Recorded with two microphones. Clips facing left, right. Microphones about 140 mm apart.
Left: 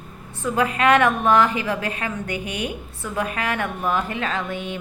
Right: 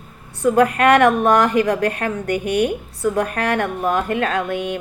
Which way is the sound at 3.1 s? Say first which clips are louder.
Even; 45° right (ahead or behind).